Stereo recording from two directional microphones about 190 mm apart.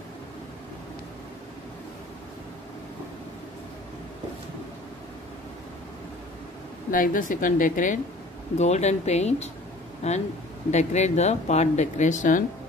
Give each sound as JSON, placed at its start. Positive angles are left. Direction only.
{"t": 6.9, "sound": "a woman's voice", "side_deg": 45}